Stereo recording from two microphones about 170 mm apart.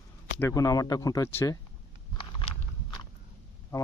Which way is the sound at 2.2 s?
30° left (ahead or behind).